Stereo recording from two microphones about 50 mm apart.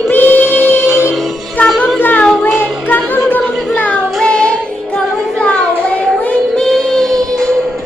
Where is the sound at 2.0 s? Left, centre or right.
Left.